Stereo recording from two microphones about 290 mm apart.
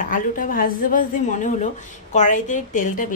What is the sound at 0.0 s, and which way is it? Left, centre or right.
A woman's voice, left.